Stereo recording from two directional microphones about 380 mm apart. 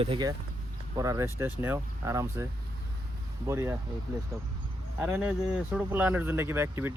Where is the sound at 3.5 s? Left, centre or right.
Centre.